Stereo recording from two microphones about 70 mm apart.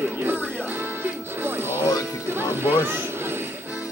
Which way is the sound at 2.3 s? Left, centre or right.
Right.